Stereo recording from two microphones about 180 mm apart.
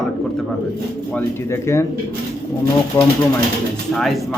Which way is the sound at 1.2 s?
15° left (ahead or behind).